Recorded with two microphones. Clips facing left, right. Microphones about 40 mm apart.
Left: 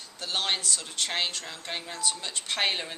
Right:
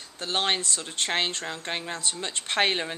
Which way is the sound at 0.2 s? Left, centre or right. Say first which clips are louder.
Right 3 dB; right.